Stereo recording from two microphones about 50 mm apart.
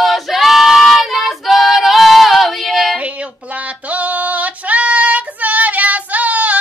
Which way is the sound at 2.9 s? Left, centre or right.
Right.